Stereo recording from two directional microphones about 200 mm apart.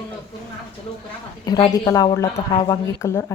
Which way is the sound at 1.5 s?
20° left (ahead or behind).